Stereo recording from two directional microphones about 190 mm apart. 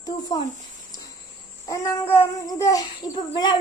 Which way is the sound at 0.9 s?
20° left (ahead or behind).